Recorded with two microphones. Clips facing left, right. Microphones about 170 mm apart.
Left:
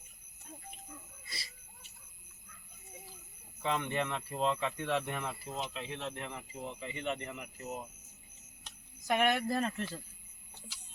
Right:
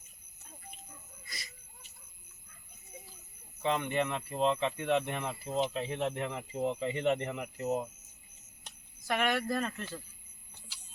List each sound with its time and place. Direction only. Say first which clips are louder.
1.3 s speech: even; 30° left (ahead or behind)
3.6 s speech: right 3 dB; 20° right (ahead or behind)
5.7 s speech: right 7 dB; 45° right (ahead or behind); by 7.7 s 70° right (ahead or behind)
9.0 s speech: left 1 dB; 20° left (ahead or behind)